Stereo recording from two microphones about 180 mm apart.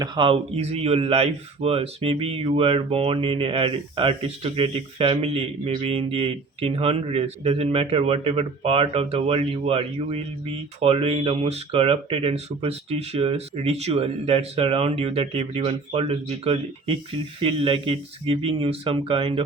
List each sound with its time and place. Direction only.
0.0 s a man's voice: 30° right (ahead or behind)